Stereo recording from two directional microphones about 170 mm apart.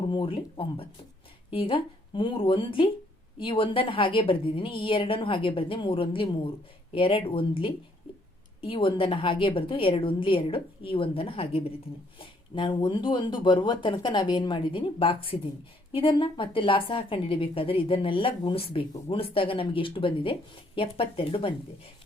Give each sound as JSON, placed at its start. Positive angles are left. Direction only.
{"t": 0.1, "sound": "a woman's voice", "side_deg": 30}